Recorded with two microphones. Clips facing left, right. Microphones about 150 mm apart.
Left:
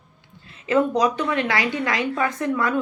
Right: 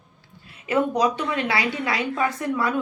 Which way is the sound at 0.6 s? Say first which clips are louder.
Left 2 dB; 15° right (ahead or behind).